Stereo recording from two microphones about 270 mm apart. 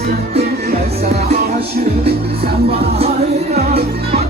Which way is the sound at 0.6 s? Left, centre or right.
Right.